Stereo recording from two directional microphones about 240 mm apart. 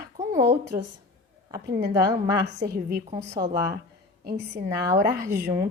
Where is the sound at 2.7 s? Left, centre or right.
Right.